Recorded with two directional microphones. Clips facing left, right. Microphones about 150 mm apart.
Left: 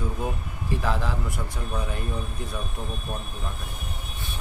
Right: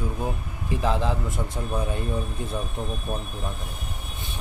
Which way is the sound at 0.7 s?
20° right (ahead or behind).